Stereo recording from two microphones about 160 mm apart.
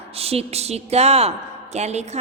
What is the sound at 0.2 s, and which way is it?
A woman's voice, 40° right (ahead or behind).